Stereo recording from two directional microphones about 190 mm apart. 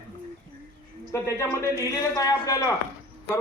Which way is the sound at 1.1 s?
15° left (ahead or behind).